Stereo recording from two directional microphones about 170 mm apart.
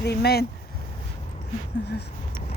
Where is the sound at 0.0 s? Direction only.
70° left (ahead or behind).